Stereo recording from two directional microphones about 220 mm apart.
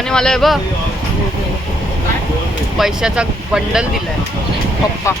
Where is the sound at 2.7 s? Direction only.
Centre (ahead or behind).